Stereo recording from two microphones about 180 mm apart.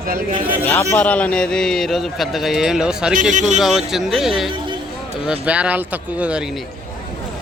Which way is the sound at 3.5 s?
Centre (ahead or behind).